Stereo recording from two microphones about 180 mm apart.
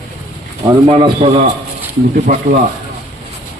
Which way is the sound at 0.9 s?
35° right (ahead or behind).